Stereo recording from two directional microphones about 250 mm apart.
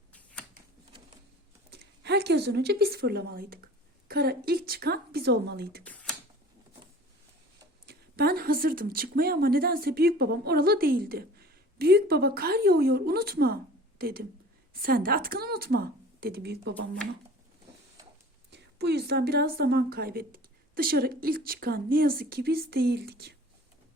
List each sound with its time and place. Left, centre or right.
0.1 s shuffling cards: centre
1.7 s a woman's voice: right
5.8 s a sound: centre
7.9 s speech: right
18.5 s speech: right